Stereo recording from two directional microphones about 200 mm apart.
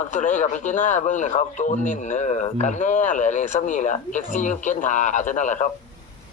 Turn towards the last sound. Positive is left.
turn(degrees=40)  # may be behind; listen again after turning